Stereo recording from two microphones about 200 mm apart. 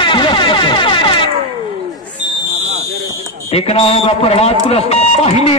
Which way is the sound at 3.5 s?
30° left (ahead or behind).